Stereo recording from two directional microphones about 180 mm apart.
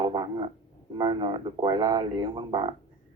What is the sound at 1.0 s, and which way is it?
Speech, 25° right (ahead or behind).